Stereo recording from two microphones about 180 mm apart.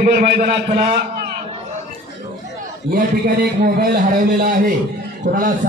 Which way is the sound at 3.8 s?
55° right (ahead or behind).